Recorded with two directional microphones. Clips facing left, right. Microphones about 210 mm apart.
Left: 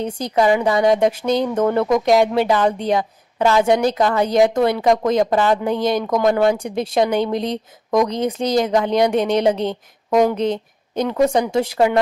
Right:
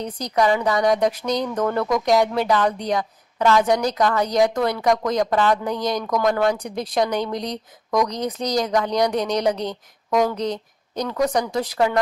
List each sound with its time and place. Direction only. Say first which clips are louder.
0.0 s a woman's voice: left 3 dB; 25° left (ahead or behind)